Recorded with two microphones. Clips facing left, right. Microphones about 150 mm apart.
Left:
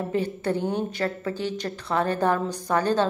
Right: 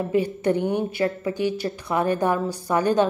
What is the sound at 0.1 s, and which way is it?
A woman's voice, 15° right (ahead or behind).